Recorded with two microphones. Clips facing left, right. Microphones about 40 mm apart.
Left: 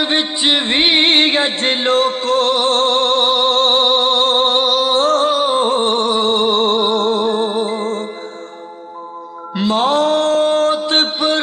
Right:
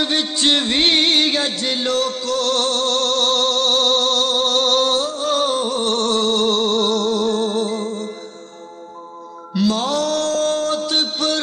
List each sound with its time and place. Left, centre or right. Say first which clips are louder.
0.0 s music: left 2 dB; left
4.6 s music: left 1 dB; centre
5.3 s a sound: left 3 dB; centre
5.6 s music: left 5 dB; left
9.5 s mantra: left 4 dB; left
11.2 s a sound: left 3 dB; left